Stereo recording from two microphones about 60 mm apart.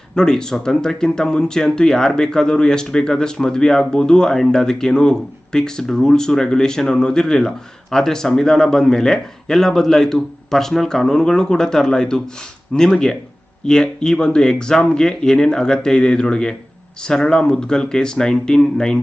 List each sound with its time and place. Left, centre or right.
0.2 s speech: centre